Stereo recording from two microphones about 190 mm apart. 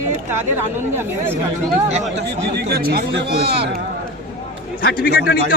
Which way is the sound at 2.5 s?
55° right (ahead or behind).